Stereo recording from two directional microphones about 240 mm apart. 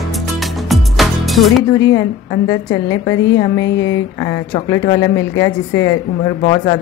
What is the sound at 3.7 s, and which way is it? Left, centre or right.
Mantra, left.